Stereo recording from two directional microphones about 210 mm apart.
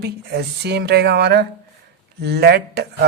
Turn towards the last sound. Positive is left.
turn(degrees=-50)  # may be behind; listen again after turning